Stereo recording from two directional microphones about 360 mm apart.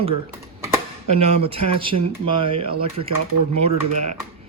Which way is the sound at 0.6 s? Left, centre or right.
Centre.